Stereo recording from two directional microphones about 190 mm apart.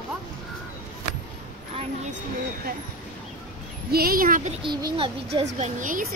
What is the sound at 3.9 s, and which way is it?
Speech, 50° right (ahead or behind).